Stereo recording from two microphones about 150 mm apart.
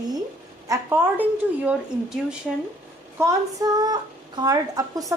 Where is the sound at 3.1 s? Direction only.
20° right (ahead or behind).